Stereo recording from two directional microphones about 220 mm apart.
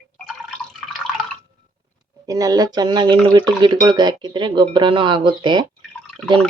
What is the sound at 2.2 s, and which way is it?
Speech, 15° right (ahead or behind).